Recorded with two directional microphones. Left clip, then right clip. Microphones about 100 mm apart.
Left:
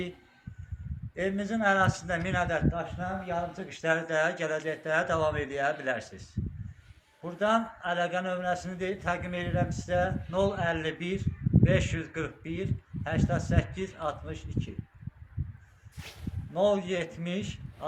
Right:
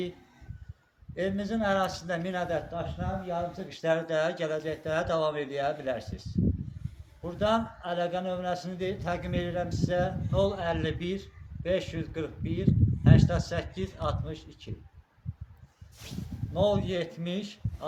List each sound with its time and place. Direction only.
1.1 s a man's voice: 15° right (ahead or behind)
16.5 s a man's voice: 20° right (ahead or behind)